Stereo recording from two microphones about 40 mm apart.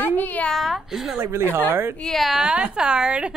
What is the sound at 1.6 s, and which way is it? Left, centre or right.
Speech, right.